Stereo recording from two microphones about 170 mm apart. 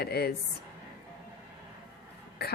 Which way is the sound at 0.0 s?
65° left (ahead or behind).